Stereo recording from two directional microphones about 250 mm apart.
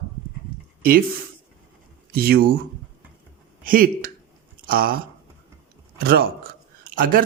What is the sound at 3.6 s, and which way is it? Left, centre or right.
Speech, right.